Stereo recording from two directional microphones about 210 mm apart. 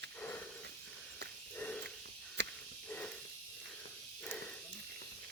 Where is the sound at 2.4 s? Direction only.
55° right (ahead or behind).